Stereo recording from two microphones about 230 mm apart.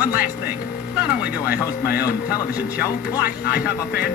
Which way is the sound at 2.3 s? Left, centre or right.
Centre.